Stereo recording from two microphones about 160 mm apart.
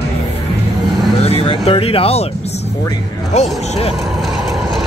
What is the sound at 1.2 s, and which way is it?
Speech, 35° left (ahead or behind).